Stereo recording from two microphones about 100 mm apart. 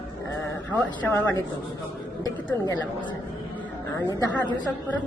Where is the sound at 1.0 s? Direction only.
20° left (ahead or behind).